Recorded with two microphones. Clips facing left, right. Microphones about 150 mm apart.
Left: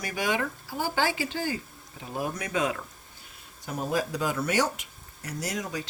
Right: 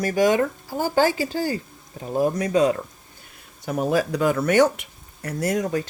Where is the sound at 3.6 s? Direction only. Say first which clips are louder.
Right 7 dB; 70° right (ahead or behind).